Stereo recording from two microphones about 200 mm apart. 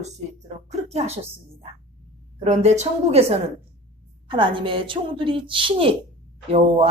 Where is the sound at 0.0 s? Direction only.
35° right (ahead or behind).